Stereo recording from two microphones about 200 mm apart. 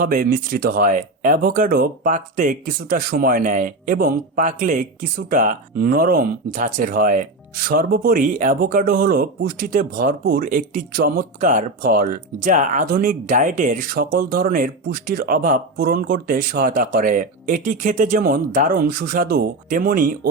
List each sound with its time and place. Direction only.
0.0 s speech: 45° right (ahead or behind)